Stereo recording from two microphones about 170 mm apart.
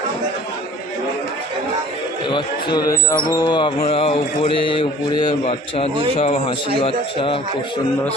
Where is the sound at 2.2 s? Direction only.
25° left (ahead or behind).